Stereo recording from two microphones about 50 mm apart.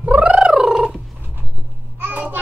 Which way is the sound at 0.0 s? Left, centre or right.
Right.